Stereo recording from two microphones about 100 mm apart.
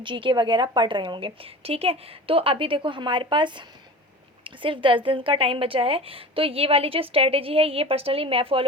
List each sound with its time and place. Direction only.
0.0 s a woman's voice: 55° right (ahead or behind)